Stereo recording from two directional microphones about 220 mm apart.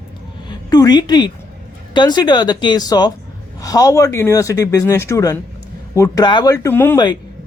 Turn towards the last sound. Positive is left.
turn(degrees=10)  # may be behind; listen again after turning